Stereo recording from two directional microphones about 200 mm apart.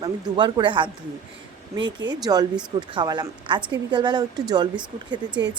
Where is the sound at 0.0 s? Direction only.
20° right (ahead or behind).